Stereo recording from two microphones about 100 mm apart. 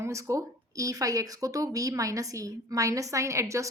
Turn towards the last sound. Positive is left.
turn(degrees=-30)  # may be behind; listen again after turning